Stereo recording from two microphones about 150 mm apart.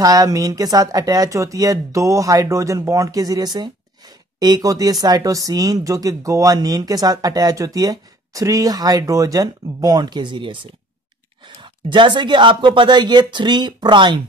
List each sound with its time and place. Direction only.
0.0 s speech: 25° right (ahead or behind)